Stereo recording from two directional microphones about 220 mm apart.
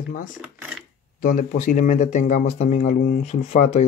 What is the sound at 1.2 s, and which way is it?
Speech, 35° left (ahead or behind).